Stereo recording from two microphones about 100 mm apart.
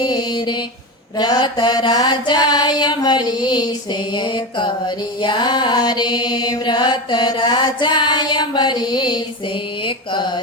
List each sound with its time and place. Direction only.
0.0 s mantra: 45° left (ahead or behind)
1.2 s music: 45° left (ahead or behind)